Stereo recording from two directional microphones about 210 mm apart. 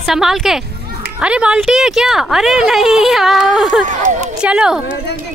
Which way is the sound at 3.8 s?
35° right (ahead or behind).